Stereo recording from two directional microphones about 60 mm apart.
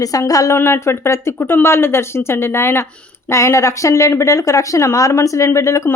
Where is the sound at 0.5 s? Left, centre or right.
Left.